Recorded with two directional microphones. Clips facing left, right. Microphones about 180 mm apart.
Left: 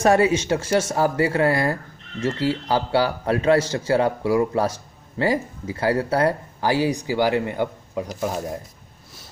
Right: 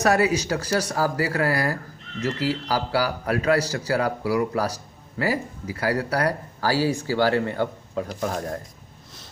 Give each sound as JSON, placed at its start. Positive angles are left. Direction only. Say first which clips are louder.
{"t": 0.0, "sound": "speech", "louder": "left 3 dB", "side_deg": 30}